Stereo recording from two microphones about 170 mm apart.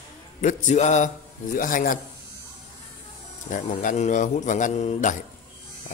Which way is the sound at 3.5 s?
50° left (ahead or behind).